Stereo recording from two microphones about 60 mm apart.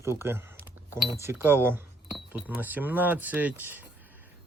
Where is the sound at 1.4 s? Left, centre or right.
Right.